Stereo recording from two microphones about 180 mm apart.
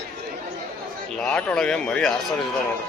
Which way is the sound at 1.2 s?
5° left (ahead or behind).